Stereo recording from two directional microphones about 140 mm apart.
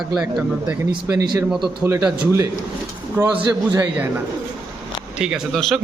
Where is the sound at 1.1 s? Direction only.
30° right (ahead or behind).